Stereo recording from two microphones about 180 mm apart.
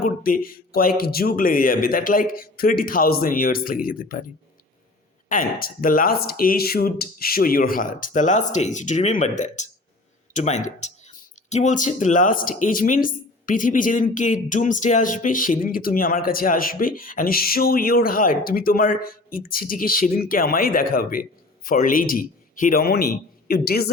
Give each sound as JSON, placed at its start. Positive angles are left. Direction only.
{"t": 0.0, "sound": "speech", "side_deg": 50}
{"t": 5.3, "sound": "speech", "side_deg": 50}